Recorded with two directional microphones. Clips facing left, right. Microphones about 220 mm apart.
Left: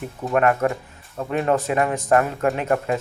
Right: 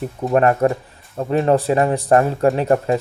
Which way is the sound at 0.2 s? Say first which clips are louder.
Right 4 dB; 30° right (ahead or behind).